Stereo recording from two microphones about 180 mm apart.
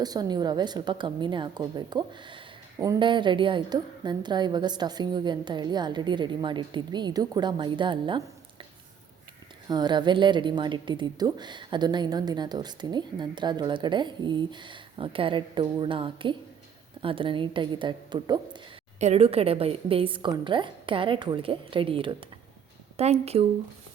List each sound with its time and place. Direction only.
0.0 s a woman's voice: 20° right (ahead or behind)
9.6 s a woman's voice: 25° right (ahead or behind)
18.9 s a woman's voice: 35° right (ahead or behind)